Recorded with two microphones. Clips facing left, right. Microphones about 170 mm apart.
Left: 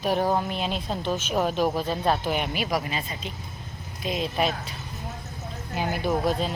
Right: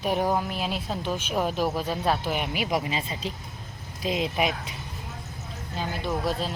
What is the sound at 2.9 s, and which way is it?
Speech, 25° right (ahead or behind).